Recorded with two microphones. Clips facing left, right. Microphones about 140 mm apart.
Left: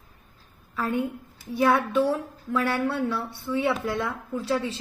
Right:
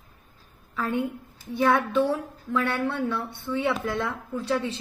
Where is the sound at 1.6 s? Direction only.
10° left (ahead or behind).